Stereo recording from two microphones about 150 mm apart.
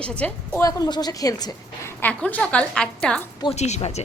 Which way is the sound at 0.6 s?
25° left (ahead or behind).